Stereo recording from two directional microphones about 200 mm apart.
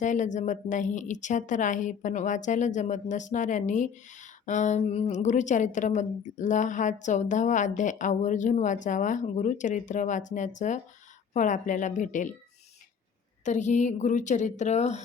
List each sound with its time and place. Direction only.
0.0 s a woman's voice: 40° left (ahead or behind)
13.4 s a woman's voice: 35° left (ahead or behind)